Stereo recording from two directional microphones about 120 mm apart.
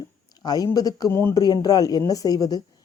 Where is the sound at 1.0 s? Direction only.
20° left (ahead or behind).